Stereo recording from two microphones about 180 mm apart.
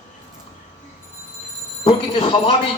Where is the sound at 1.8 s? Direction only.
30° left (ahead or behind).